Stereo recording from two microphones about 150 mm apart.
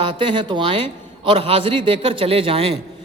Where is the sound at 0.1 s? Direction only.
35° right (ahead or behind).